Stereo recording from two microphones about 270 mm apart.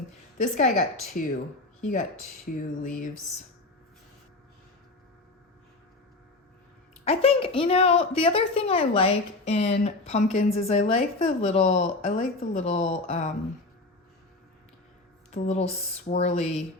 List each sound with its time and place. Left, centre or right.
0.3 s a woman's voice: left
7.0 s a woman's voice: left
15.3 s a woman's voice: left